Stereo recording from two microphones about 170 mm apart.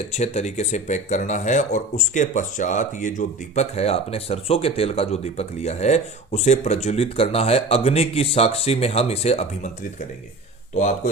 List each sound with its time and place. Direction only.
0.1 s speech: 40° left (ahead or behind)
10.8 s speech: 45° left (ahead or behind)